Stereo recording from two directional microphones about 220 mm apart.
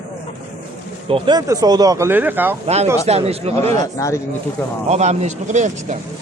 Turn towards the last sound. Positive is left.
turn(degrees=-35)  # may be behind; listen again after turning